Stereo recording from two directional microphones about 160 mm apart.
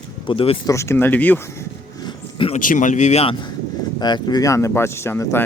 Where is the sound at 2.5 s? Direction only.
55° left (ahead or behind).